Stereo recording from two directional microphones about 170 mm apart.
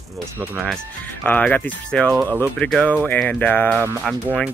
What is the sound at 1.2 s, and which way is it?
Speech, 10° left (ahead or behind).